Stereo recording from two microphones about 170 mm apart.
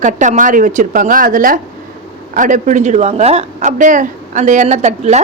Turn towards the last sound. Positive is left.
turn(degrees=-40)  # may be behind; listen again after turning